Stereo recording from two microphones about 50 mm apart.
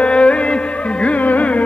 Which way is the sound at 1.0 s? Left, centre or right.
Left.